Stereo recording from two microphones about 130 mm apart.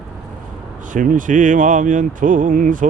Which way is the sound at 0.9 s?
90° right.